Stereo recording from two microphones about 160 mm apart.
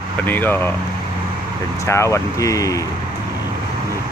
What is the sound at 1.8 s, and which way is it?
Speech, 15° left (ahead or behind).